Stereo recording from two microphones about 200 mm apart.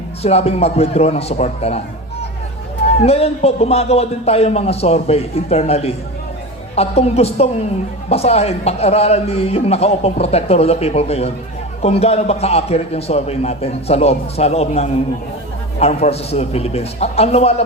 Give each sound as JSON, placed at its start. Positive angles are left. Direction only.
{"t": 0.2, "sound": "a man's voice", "side_deg": 30}
{"t": 2.8, "sound": "a man's voice", "side_deg": 30}